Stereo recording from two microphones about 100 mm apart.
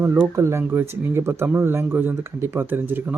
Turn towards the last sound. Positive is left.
turn(degrees=-20)  # may be behind; listen again after turning